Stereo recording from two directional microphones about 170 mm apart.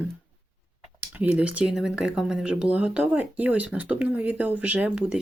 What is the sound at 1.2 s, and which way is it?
Speech, 5° right (ahead or behind).